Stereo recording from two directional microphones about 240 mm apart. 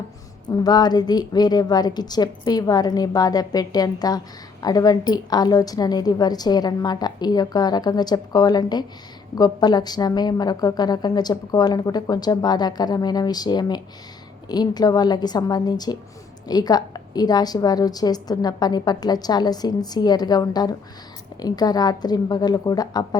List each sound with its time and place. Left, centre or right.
0.4 s a woman's voice: centre